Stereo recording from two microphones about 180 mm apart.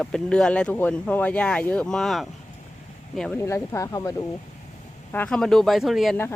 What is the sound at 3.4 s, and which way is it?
Speech, 15° left (ahead or behind).